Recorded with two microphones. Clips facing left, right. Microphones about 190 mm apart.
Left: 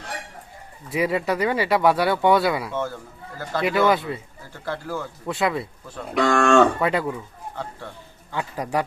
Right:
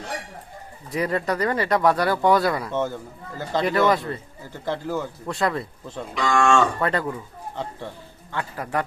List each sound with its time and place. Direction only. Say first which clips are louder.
0.9 s speech: left 1 dB; 5° left (ahead or behind)
4.6 s speech: right 3 dB; 15° right (ahead or behind)
5.2 s speech: left 3 dB; 5° left (ahead or behind)
6.1 s speech: left 3 dB; 60° left (ahead or behind)
6.7 s speech: left 1 dB; 5° left (ahead or behind)
7.5 s speech: right 2 dB; 20° right (ahead or behind)
8.3 s speech: left 2 dB; 15° left (ahead or behind)